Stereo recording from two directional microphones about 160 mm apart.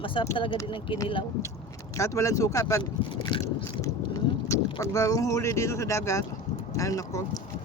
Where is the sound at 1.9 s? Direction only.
20° left (ahead or behind).